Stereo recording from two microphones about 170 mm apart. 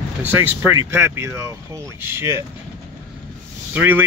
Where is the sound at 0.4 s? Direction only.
15° right (ahead or behind).